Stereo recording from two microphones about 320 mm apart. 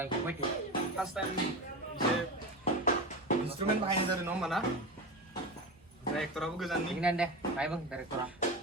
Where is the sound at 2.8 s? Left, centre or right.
Left.